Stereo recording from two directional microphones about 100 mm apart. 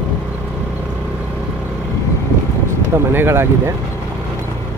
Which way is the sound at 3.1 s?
25° right (ahead or behind).